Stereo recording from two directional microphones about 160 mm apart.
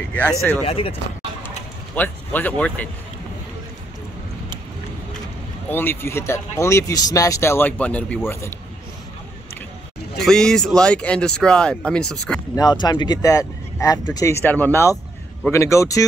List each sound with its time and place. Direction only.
0.7 s speech: 35° left (ahead or behind)
2.0 s speech: 10° left (ahead or behind)
5.7 s speech: 15° left (ahead or behind)
10.2 s speech: 5° left (ahead or behind)
12.5 s speech: 25° left (ahead or behind)